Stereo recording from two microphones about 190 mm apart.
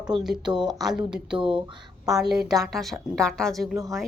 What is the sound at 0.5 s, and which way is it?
Speech, 25° right (ahead or behind).